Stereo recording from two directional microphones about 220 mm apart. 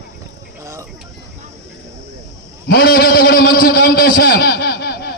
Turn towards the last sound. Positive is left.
turn(degrees=45)  # may be behind; listen again after turning